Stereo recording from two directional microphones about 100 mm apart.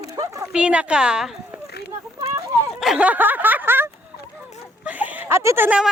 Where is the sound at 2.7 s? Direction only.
5° right (ahead or behind); by 3.8 s 20° right (ahead or behind).